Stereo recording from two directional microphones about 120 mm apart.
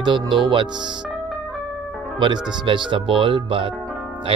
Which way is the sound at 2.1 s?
40° right (ahead or behind).